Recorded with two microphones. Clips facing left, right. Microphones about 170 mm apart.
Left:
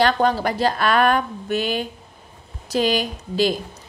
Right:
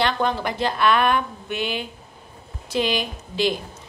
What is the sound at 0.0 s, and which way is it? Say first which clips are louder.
A woman's voice: left 4 dB; 35° left (ahead or behind).